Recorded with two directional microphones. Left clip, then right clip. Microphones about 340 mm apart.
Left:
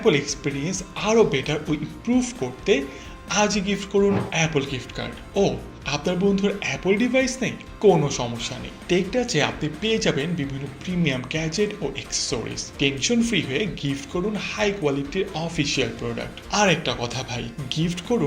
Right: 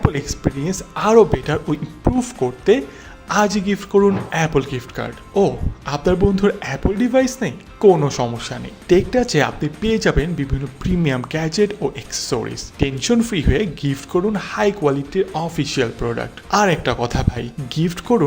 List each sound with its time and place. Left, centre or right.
0.3 s speech: right